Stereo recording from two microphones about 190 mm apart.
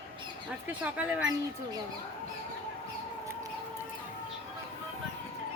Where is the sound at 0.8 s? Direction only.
5° right (ahead or behind).